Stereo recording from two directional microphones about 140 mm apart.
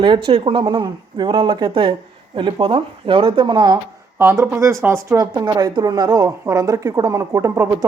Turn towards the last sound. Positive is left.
turn(degrees=-20)  # may be behind; listen again after turning